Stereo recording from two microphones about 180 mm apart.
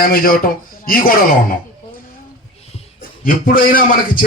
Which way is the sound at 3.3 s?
55° left (ahead or behind).